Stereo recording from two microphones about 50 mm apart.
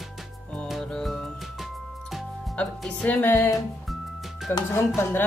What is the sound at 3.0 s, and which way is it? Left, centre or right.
Music, left.